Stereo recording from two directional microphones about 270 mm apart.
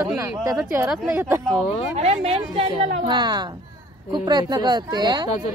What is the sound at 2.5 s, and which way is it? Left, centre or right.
Speech, centre.